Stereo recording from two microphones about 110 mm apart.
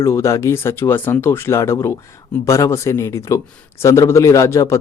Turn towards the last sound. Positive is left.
turn(degrees=25)  # may be behind; listen again after turning